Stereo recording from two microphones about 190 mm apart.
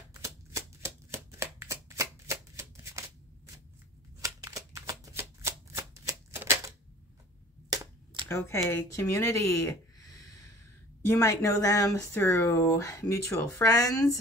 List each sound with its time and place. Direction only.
0.1 s a sound: 15° right (ahead or behind)
4.2 s shuffling cards: 15° right (ahead or behind)
8.3 s speech: 15° left (ahead or behind)